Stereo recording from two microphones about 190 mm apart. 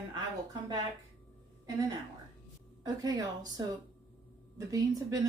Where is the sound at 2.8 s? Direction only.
20° right (ahead or behind).